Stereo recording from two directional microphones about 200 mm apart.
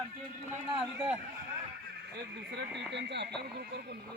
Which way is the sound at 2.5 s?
60° right (ahead or behind).